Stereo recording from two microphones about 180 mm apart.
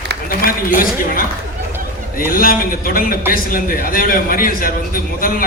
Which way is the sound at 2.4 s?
50° left (ahead or behind).